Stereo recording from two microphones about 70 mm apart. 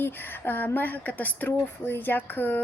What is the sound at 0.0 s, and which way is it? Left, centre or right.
Speech, left.